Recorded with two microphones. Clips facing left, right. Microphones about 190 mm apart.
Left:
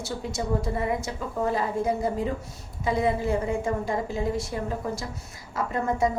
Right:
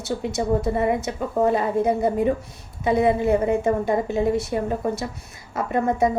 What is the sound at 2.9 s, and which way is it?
A woman's voice, 60° right (ahead or behind).